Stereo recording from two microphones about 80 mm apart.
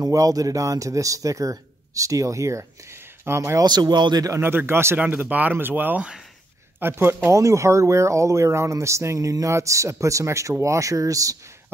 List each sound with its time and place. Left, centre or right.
0.0 s speech: right
3.6 s speech: right
4.3 s speech: right
5.0 s speech: right